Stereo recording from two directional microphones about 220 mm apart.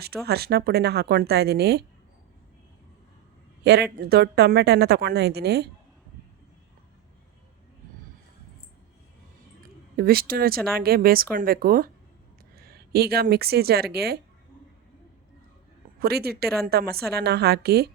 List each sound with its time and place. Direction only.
0.0 s a woman's voice: 45° right (ahead or behind)
3.6 s a man's voice: 50° right (ahead or behind)
10.0 s a woman's voice: 40° right (ahead or behind)
16.0 s a woman's voice: 45° right (ahead or behind)